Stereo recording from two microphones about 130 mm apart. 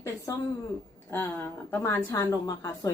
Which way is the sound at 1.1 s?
15° left (ahead or behind).